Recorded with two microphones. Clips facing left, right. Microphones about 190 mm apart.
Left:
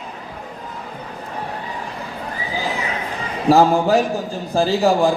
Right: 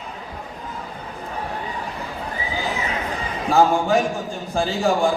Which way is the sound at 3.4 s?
35° left (ahead or behind).